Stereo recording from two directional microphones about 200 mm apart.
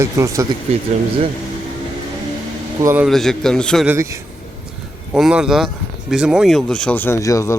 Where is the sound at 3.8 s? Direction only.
15° right (ahead or behind).